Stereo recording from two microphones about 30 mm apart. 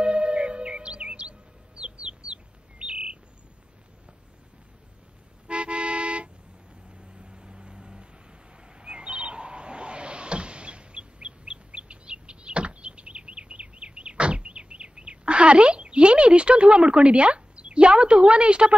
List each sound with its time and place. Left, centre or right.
0.0 s music: right
1.8 s bird: right
5.5 s vehicle: right
7.0 s vehicle: right
8.8 s a sound: right